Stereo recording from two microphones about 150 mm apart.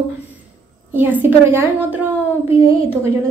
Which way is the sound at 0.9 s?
15° right (ahead or behind).